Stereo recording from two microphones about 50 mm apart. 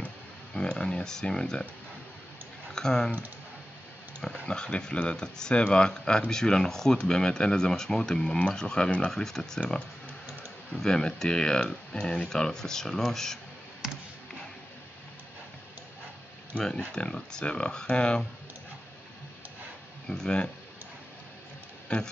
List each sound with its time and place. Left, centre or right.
0.6 s speech: centre
2.7 s speech: centre
4.2 s speech: centre
9.1 s speech: centre
9.6 s speech: left
16.9 s speech: centre
20.1 s speech: centre
21.8 s speech: centre